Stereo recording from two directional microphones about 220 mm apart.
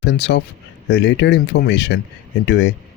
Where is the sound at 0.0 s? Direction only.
50° left (ahead or behind).